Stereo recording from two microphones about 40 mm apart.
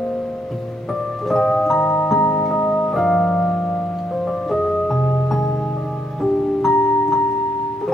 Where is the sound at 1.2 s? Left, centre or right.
Centre.